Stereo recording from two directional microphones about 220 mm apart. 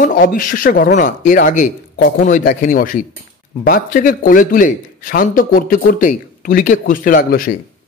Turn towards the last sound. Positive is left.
turn(degrees=40)  # may be behind; listen again after turning